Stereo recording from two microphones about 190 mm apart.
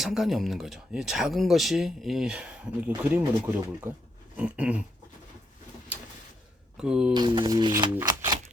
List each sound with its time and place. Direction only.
0.0 s speech: centre (ahead or behind)
3.9 s speech: 45° right (ahead or behind)
4.4 s a sound: 5° right (ahead or behind)
6.7 s speech: 5° right (ahead or behind)
7.1 s speech: 25° right (ahead or behind)